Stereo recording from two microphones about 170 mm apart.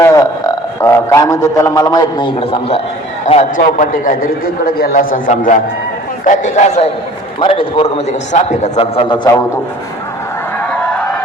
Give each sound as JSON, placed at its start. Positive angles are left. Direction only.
{"t": 0.0, "sound": "a man's voice", "side_deg": 20}
{"t": 3.9, "sound": "a man's voice", "side_deg": 55}
{"t": 7.3, "sound": "a man's voice", "side_deg": 30}
{"t": 10.6, "sound": "a sound", "side_deg": 5}